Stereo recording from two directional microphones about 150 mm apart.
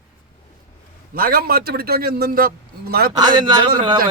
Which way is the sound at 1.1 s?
75° right (ahead or behind).